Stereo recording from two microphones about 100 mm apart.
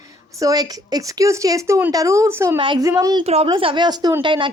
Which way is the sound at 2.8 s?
35° right (ahead or behind).